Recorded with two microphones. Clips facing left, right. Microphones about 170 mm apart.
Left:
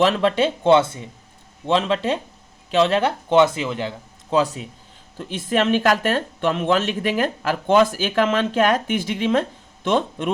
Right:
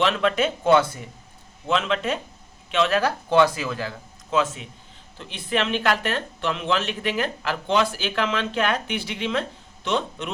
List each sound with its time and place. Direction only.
0.0 s speech: 35° left (ahead or behind)
4.3 s speech: 35° left (ahead or behind)